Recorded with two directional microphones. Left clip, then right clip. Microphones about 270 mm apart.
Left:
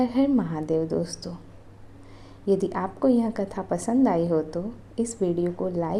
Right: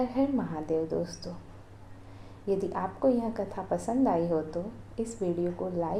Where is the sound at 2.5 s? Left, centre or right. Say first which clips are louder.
Left 5 dB; left.